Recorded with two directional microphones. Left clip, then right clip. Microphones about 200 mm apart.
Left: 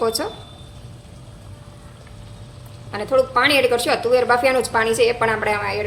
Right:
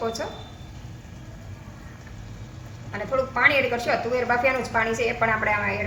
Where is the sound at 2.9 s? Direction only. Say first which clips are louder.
Left 8 dB; 55° left (ahead or behind).